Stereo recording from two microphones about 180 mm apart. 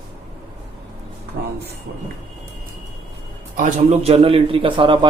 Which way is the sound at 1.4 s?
50° right (ahead or behind).